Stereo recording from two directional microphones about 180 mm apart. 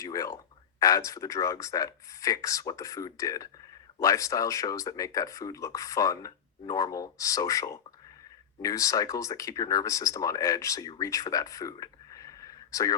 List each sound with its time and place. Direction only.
0.0 s speech: 20° left (ahead or behind)